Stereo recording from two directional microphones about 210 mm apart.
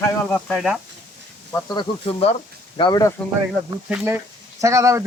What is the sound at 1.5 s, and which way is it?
Speech, 10° left (ahead or behind).